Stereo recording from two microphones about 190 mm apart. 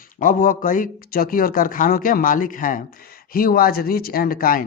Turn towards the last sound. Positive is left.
turn(degrees=50)  # may be behind; listen again after turning